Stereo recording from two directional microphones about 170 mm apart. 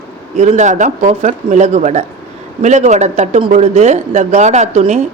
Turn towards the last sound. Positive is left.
turn(degrees=-40)  # may be behind; listen again after turning